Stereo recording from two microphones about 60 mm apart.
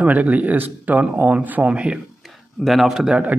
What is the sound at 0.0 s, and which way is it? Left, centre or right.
Speech, right.